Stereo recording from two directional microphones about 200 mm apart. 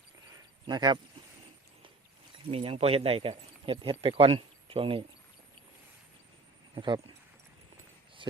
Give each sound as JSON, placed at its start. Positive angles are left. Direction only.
{"t": 0.7, "sound": "speech", "side_deg": -20}
{"t": 2.5, "sound": "speech", "side_deg": -30}
{"t": 6.7, "sound": "speech", "side_deg": -25}
{"t": 8.2, "sound": "a sound", "side_deg": -25}